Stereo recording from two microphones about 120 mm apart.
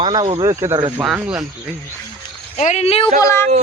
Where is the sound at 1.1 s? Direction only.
10° right (ahead or behind).